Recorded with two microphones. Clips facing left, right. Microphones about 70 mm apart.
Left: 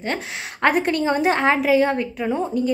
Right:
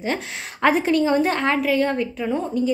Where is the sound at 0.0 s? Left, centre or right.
Centre.